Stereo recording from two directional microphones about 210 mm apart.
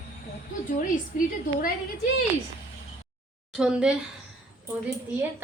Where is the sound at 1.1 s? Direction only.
40° left (ahead or behind).